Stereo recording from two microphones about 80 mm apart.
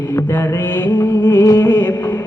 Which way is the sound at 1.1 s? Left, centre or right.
Left.